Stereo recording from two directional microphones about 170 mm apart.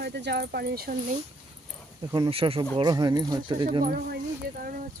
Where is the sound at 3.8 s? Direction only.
55° right (ahead or behind).